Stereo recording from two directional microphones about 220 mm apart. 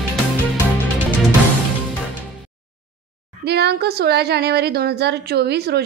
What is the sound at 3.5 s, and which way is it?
A woman's voice, 50° right (ahead or behind).